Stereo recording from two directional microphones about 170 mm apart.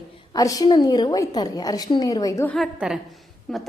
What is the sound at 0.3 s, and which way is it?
A woman's voice, 20° left (ahead or behind).